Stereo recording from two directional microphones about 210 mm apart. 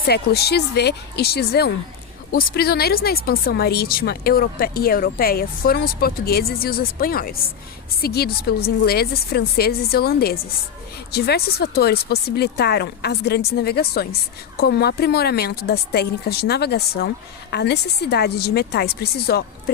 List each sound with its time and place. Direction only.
0.1 s speech: 50° left (ahead or behind)